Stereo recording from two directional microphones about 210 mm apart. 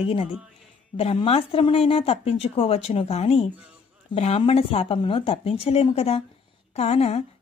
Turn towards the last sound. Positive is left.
turn(degrees=30)  # may be behind; listen again after turning